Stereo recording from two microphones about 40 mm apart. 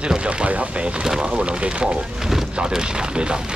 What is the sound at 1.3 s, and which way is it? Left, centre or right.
Speech, right.